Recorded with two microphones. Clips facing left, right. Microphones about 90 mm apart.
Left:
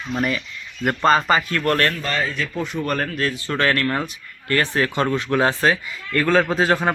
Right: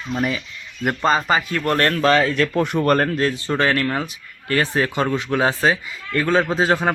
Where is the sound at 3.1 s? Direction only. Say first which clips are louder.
Right 3 dB; 30° right (ahead or behind).